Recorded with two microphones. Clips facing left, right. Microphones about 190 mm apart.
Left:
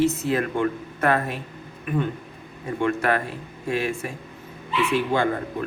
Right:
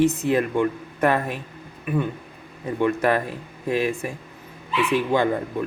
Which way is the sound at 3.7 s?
20° right (ahead or behind).